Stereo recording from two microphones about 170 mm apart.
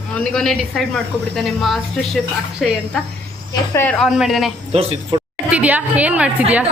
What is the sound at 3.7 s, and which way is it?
Speech, 15° left (ahead or behind).